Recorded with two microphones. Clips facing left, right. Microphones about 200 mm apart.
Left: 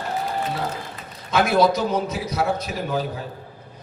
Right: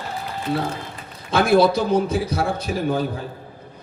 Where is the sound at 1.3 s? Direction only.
30° right (ahead or behind).